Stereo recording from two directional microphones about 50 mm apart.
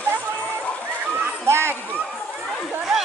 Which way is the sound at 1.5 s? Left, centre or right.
Right.